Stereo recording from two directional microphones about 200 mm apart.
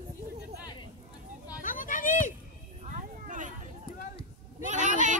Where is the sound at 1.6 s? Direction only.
40° left (ahead or behind).